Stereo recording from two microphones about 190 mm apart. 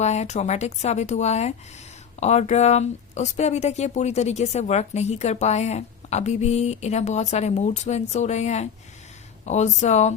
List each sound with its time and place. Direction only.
0.0 s speech: 35° left (ahead or behind)